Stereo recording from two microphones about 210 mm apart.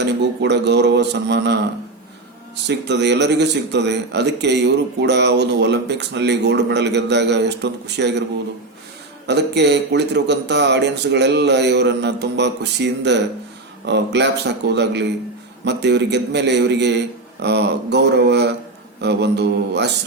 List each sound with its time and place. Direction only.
0.0 s speech: 55° right (ahead or behind)
2.6 s a man's voice: 55° right (ahead or behind)
9.2 s a man's voice: 55° right (ahead or behind)